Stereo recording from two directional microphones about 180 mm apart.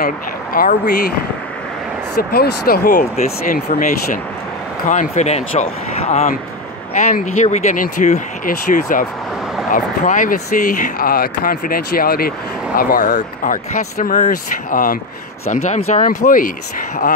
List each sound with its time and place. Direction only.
0.0 s speech: 50° left (ahead or behind)
2.1 s speech: 60° left (ahead or behind)